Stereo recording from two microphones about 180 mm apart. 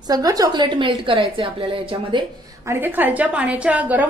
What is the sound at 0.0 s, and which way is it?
A woman's voice, 20° right (ahead or behind).